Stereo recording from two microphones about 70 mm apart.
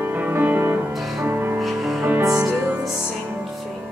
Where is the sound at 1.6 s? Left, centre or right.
Centre.